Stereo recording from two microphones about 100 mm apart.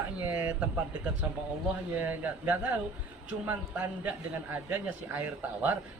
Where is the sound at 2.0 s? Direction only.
20° right (ahead or behind).